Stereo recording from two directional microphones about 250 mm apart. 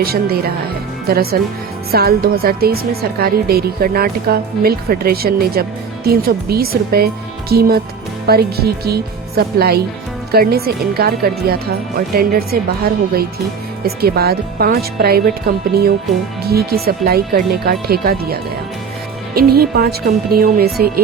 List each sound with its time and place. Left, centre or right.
0.0 s a woman's voice: right